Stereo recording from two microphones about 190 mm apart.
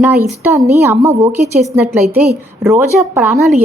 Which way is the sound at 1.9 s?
Centre (ahead or behind).